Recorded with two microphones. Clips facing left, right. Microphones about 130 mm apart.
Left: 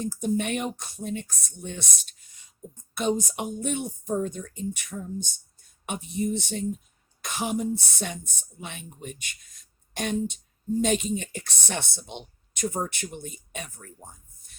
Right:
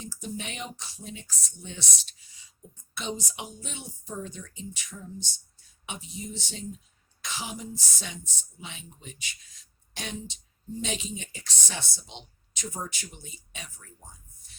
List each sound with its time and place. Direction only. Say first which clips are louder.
0.0 s speech: left 11 dB; 50° left (ahead or behind)